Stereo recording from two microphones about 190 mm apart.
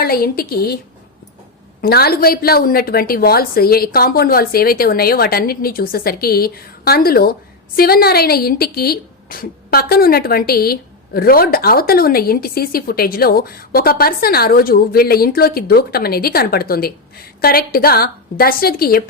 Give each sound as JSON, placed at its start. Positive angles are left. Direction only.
{"t": 0.0, "sound": "a woman's voice", "side_deg": 50}
{"t": 1.8, "sound": "a woman's voice", "side_deg": 55}